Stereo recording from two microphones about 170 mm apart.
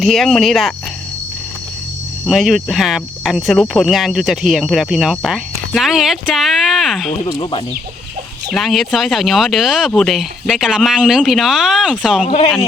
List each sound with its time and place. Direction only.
0.0 s speech: centre (ahead or behind)
2.2 s speech: centre (ahead or behind)
7.3 s speech: 30° left (ahead or behind)
8.5 s speech: centre (ahead or behind)
12.2 s speech: 35° left (ahead or behind)